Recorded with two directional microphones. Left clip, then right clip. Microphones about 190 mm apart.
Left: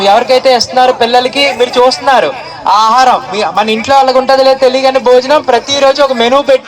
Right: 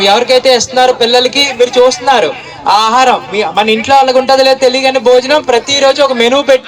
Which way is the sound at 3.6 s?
15° right (ahead or behind).